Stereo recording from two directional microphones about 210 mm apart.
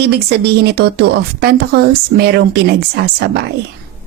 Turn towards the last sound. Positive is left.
turn(degrees=-50)  # may be behind; listen again after turning